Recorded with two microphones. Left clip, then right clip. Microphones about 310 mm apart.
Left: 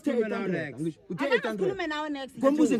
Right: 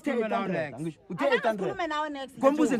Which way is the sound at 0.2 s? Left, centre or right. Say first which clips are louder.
Right 1 dB; right.